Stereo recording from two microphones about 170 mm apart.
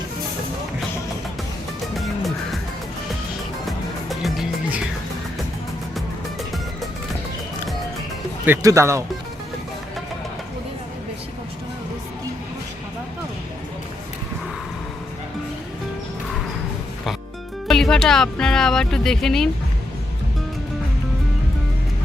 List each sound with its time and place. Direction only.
2.0 s music: centre (ahead or behind)
3.7 s music: centre (ahead or behind)
8.4 s speech: 15° right (ahead or behind)
17.7 s music: centre (ahead or behind)